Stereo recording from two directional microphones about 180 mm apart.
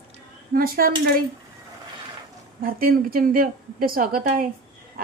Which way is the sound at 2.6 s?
55° right (ahead or behind).